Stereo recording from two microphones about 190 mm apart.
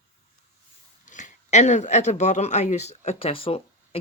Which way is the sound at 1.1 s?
40° left (ahead or behind).